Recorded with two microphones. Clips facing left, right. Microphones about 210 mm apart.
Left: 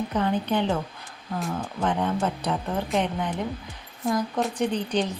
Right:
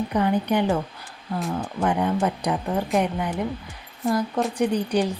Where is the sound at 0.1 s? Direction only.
10° right (ahead or behind).